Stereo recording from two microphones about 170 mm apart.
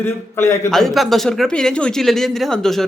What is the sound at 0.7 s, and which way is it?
Speech, centre (ahead or behind).